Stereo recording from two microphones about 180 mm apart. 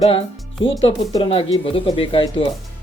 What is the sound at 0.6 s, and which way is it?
Speech, 30° left (ahead or behind).